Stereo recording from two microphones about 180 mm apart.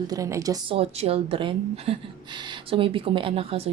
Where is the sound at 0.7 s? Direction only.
35° right (ahead or behind).